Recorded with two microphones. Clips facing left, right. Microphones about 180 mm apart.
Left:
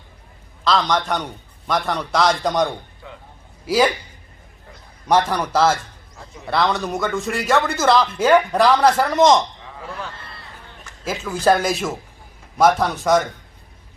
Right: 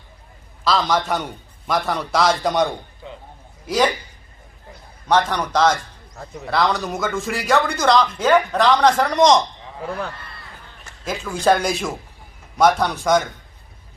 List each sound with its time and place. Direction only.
0.6 s speech: 5° right (ahead or behind)
3.0 s a sound: 20° right (ahead or behind)
5.0 s a man's voice: 10° left (ahead or behind)
11.0 s speech: 5° left (ahead or behind)